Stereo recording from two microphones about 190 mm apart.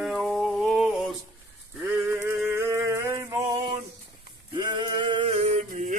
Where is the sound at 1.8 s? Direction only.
10° right (ahead or behind).